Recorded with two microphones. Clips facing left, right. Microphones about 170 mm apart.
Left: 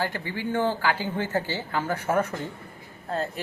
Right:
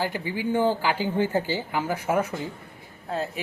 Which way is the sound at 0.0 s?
10° right (ahead or behind).